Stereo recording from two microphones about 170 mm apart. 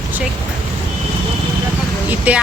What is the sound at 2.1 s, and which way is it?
Speech, 10° right (ahead or behind).